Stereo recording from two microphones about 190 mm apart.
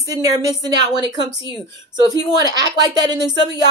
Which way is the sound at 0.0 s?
20° right (ahead or behind).